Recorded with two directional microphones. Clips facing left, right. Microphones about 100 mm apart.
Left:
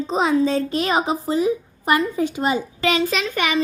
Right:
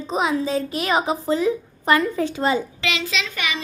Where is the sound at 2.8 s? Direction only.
45° left (ahead or behind).